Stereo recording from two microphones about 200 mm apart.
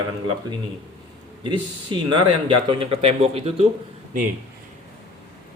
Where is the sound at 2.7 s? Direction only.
25° right (ahead or behind).